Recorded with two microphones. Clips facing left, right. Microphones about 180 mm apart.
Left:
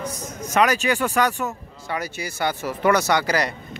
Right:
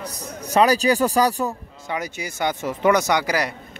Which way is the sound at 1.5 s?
20° right (ahead or behind).